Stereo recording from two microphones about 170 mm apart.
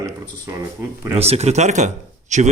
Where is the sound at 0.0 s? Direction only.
15° right (ahead or behind).